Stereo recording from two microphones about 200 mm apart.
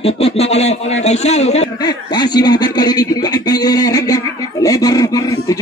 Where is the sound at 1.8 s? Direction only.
20° left (ahead or behind).